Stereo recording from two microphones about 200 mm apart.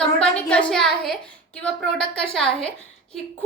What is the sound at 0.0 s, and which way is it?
A woman's voice, 5° left (ahead or behind).